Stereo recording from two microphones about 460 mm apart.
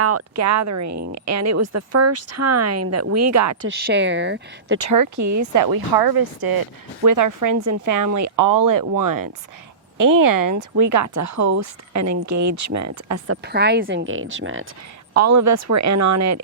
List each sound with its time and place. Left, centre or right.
0.0 s speech: right
3.7 s speech: right
4.9 s speech: right